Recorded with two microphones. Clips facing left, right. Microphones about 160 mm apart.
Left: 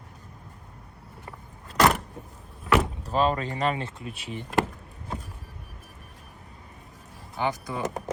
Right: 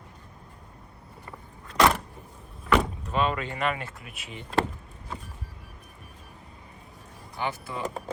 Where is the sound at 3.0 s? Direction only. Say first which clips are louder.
Left 3 dB; 35° left (ahead or behind).